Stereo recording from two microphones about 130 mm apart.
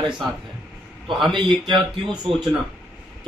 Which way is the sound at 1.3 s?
35° right (ahead or behind).